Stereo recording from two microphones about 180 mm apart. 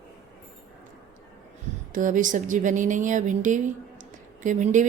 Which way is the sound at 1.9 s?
45° right (ahead or behind).